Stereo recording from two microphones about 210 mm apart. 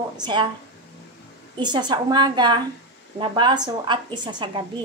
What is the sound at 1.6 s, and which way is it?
A woman's voice, 20° right (ahead or behind).